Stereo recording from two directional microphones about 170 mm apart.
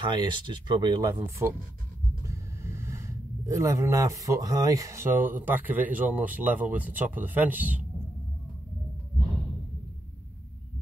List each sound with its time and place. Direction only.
0.0 s speech: 25° right (ahead or behind)
1.4 s speech: 10° right (ahead or behind)